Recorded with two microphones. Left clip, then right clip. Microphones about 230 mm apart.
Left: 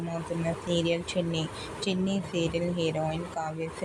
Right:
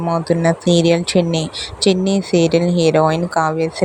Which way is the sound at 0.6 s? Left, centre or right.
Right.